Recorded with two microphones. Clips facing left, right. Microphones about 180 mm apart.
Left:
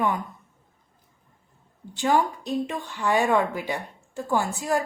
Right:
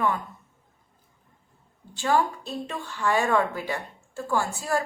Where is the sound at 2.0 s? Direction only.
15° left (ahead or behind).